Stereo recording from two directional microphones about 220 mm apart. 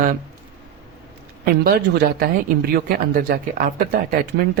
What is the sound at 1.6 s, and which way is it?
Speech, 45° right (ahead or behind).